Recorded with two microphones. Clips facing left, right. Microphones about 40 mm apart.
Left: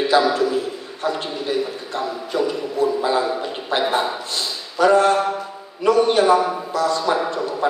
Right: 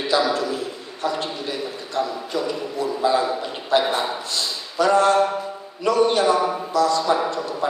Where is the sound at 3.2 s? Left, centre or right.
Centre.